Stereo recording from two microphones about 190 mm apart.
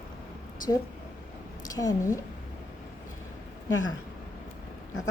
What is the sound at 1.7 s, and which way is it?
Speech, 20° left (ahead or behind).